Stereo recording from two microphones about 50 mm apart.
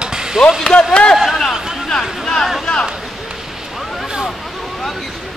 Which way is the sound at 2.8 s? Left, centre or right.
Centre.